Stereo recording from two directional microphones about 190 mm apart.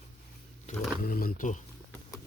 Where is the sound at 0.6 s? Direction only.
50° left (ahead or behind).